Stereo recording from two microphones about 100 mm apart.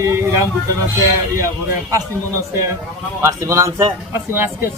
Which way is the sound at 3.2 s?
30° right (ahead or behind).